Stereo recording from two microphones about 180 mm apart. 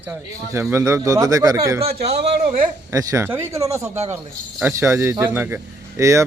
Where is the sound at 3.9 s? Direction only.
35° right (ahead or behind).